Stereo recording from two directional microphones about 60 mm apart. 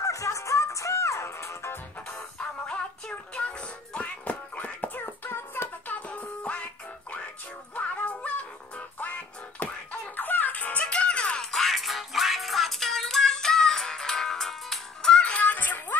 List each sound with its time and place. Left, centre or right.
0.0 s music: left
2.7 s music: centre; by 5.7 s left
5.9 s music: left
11.5 s music: centre
15.4 s music: left